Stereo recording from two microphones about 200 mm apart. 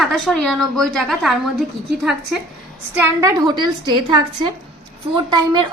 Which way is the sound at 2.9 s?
10° right (ahead or behind).